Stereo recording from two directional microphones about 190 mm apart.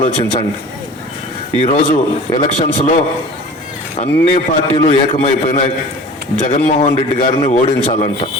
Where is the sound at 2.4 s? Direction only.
40° left (ahead or behind).